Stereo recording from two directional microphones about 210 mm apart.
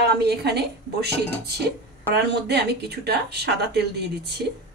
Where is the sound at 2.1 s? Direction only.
50° right (ahead or behind).